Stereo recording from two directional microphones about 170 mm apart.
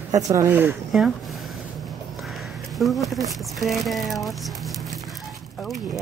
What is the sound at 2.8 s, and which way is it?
Speech, centre (ahead or behind).